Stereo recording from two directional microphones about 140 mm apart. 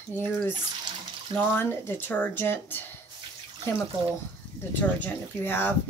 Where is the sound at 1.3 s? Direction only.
15° left (ahead or behind).